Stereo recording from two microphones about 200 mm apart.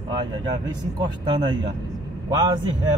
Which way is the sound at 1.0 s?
20° right (ahead or behind).